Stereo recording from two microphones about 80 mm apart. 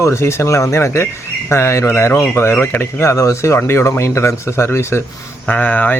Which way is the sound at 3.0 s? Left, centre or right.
Left.